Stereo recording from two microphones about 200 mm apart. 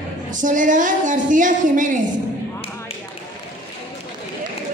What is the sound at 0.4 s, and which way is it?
Speech, 40° right (ahead or behind).